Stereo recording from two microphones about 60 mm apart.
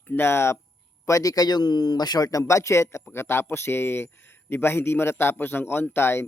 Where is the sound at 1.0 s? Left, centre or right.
Left.